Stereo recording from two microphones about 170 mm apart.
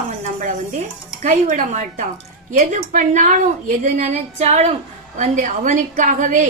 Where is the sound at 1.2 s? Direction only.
45° right (ahead or behind).